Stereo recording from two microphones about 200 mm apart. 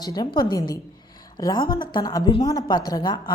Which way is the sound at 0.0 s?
20° left (ahead or behind).